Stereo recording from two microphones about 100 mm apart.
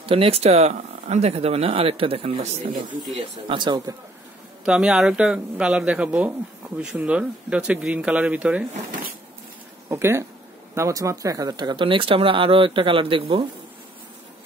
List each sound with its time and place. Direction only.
0.0 s speech: 75° right (ahead or behind)
3.2 s speech: 55° right (ahead or behind)
4.6 s speech: 10° right (ahead or behind)
9.8 s speech: 25° right (ahead or behind); by 13.5 s 60° right (ahead or behind)